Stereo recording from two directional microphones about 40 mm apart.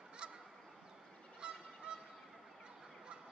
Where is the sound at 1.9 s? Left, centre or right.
Right.